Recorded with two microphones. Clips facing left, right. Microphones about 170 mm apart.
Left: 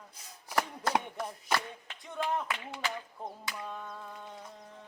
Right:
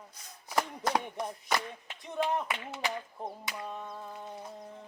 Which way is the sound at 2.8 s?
20° right (ahead or behind).